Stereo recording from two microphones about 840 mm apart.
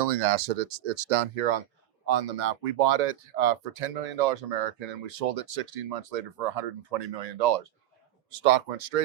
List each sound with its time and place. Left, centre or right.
0.0 s speech: right